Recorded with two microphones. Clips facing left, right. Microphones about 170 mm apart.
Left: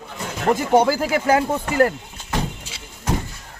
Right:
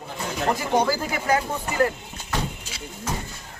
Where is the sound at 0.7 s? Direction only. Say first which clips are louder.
Left 7 dB; 25° left (ahead or behind).